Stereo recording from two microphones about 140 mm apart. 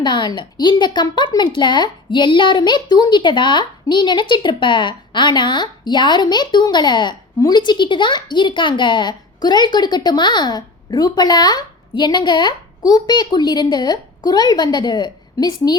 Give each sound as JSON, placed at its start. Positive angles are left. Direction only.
{"t": 0.0, "sound": "a woman's voice", "side_deg": 35}